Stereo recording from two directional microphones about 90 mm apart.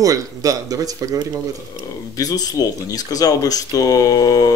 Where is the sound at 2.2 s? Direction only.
45° left (ahead or behind).